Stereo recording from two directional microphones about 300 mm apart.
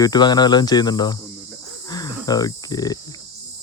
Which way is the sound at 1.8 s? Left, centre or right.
Centre.